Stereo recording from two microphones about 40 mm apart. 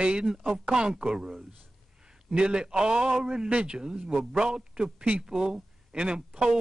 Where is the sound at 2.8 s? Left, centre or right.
Centre.